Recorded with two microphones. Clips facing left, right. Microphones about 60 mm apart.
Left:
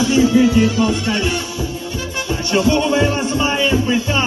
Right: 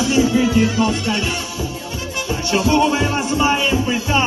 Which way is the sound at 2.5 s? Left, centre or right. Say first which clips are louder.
Even; centre.